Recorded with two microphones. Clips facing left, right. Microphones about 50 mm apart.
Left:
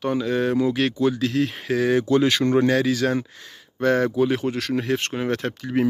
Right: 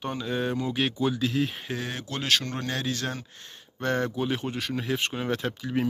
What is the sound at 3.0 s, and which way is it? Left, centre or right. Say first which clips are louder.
Speech: left 11 dB; left.